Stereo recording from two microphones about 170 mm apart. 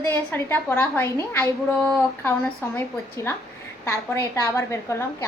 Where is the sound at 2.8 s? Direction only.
15° left (ahead or behind).